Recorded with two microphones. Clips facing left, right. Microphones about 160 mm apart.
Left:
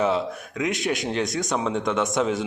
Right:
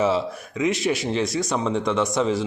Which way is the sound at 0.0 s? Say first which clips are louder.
Right 1 dB; centre (ahead or behind).